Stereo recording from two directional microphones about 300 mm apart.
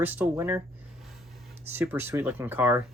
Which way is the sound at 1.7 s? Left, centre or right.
Centre.